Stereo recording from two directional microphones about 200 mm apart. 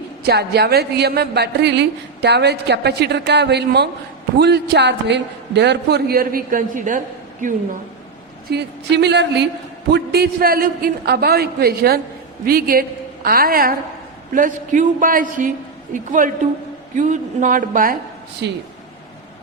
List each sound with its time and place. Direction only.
0.3 s a woman's voice: 55° right (ahead or behind)
8.4 s a woman's voice: 55° right (ahead or behind)
18.4 s a woman's voice: 60° right (ahead or behind)